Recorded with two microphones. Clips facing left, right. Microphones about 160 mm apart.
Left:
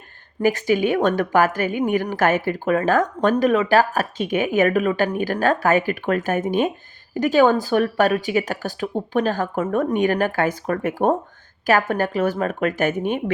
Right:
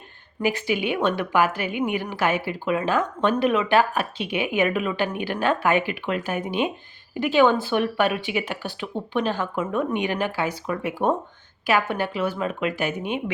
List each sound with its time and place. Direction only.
0.4 s a woman's voice: 45° left (ahead or behind)